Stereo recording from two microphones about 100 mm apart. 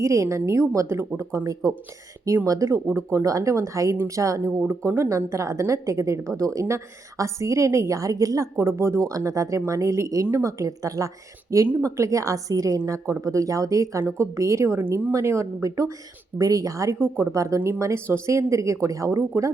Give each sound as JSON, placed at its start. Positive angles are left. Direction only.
{"t": 0.0, "sound": "a woman's voice", "side_deg": -30}
{"t": 14.8, "sound": "speech", "side_deg": -15}
{"t": 15.1, "sound": "a woman's voice", "side_deg": -30}